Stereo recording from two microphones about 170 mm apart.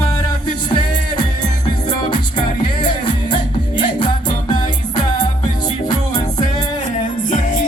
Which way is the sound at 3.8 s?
25° left (ahead or behind).